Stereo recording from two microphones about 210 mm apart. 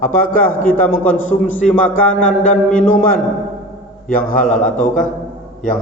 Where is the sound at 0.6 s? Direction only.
40° left (ahead or behind).